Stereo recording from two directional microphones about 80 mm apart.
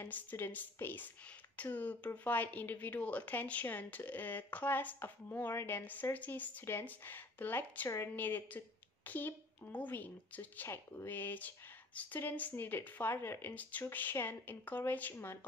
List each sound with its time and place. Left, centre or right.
0.0 s a woman's voice: left
10.7 s a woman's voice: left
13.6 s a woman's voice: centre